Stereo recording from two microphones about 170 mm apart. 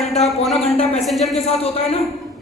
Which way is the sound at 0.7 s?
35° left (ahead or behind).